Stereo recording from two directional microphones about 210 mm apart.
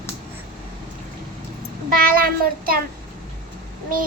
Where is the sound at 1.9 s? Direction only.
45° right (ahead or behind).